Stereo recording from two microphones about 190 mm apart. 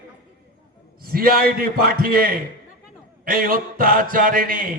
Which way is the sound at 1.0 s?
50° right (ahead or behind).